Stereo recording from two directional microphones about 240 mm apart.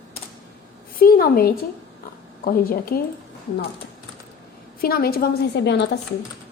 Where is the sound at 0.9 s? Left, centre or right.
Left.